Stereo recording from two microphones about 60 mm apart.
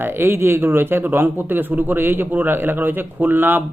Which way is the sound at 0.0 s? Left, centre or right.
Right.